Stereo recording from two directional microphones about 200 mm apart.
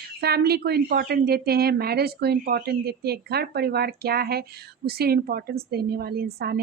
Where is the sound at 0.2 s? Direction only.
50° right (ahead or behind).